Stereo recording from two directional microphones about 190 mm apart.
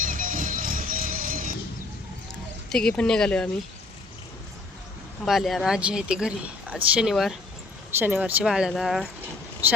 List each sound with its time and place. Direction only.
0.0 s music: 45° right (ahead or behind)
2.6 s speech: 5° left (ahead or behind)
5.2 s speech: centre (ahead or behind)